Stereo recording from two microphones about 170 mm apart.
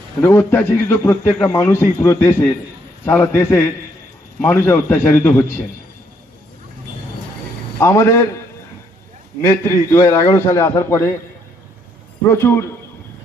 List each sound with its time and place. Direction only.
0.2 s a man's voice: 15° left (ahead or behind)
7.8 s a man's voice: 15° left (ahead or behind)
9.4 s a man's voice: 15° left (ahead or behind)
12.3 s a man's voice: 15° left (ahead or behind)